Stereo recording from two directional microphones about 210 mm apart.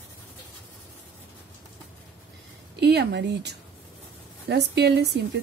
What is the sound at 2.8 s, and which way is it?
Speech, 50° right (ahead or behind).